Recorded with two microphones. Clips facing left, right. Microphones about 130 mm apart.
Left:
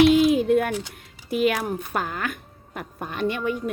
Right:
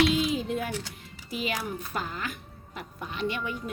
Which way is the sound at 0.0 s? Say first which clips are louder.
Left 9 dB; 60° left (ahead or behind).